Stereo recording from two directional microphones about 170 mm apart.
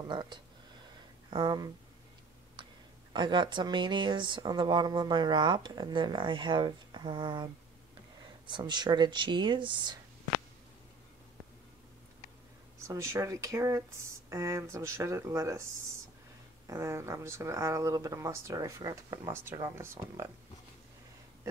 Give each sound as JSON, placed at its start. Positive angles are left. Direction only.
{"t": 0.1, "sound": "speech", "side_deg": -25}
{"t": 3.1, "sound": "speech", "side_deg": -25}
{"t": 8.5, "sound": "speech", "side_deg": -25}
{"t": 12.8, "sound": "speech", "side_deg": -15}
{"t": 16.6, "sound": "speech", "side_deg": -20}